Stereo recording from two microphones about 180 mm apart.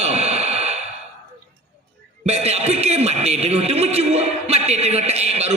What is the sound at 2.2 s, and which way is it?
A man's voice, 35° right (ahead or behind).